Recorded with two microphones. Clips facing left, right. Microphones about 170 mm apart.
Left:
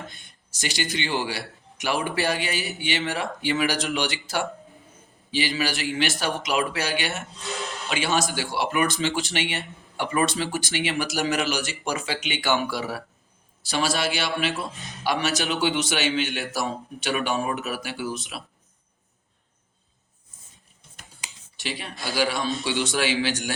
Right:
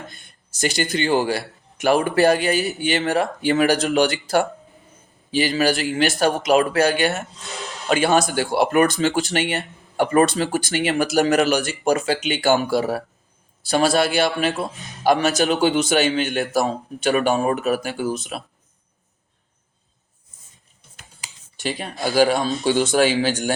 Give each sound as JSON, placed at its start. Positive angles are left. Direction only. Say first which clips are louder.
{"t": 0.8, "sound": "speech", "louder": "right 7 dB", "side_deg": -50}
{"t": 21.6, "sound": "speech", "louder": "right 8 dB", "side_deg": -45}